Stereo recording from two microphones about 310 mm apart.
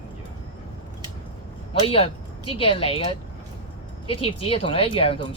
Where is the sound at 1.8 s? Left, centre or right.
Centre.